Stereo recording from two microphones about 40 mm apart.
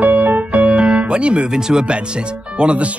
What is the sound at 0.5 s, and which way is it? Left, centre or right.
Music, right.